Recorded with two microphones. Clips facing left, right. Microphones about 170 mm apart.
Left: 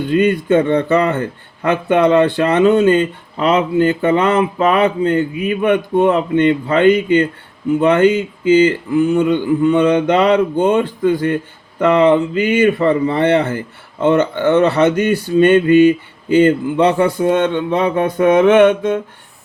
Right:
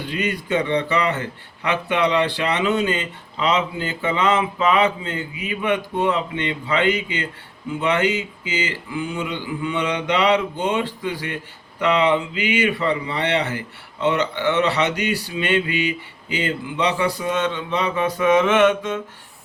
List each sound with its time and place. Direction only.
0.0 s speech: 50° left (ahead or behind)